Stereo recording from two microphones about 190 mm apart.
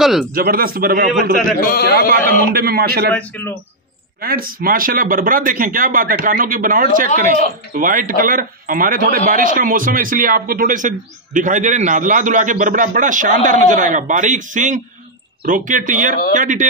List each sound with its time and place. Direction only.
0.0 s speech: centre (ahead or behind)
0.3 s a man's voice: 50° right (ahead or behind)
1.6 s a man's voice: 50° left (ahead or behind)
2.0 s a man's voice: 50° right (ahead or behind)
3.2 s speech: 10° left (ahead or behind)
4.2 s a man's voice: 50° right (ahead or behind)